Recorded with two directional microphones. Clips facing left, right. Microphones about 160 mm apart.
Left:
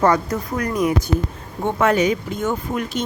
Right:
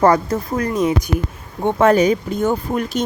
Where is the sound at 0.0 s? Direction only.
30° right (ahead or behind).